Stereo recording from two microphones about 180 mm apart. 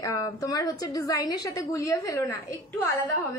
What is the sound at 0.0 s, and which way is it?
A woman's voice, 20° left (ahead or behind).